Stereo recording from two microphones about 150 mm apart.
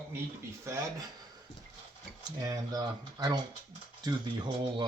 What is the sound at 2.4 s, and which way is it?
Speech, 25° right (ahead or behind).